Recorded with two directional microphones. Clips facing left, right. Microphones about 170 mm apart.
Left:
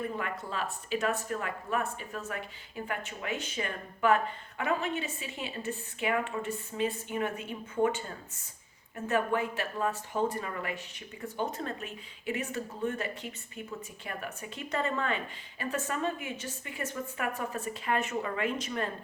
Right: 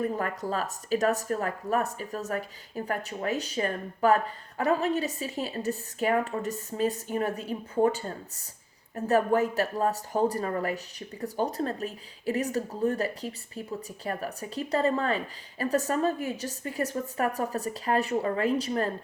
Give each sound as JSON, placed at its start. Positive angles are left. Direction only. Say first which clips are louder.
{"t": 0.0, "sound": "speech", "louder": "right 6 dB", "side_deg": -40}